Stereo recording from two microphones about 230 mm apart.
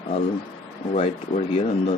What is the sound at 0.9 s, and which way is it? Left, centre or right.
Speech, left.